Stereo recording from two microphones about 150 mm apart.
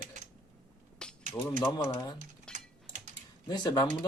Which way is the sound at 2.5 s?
5° left (ahead or behind).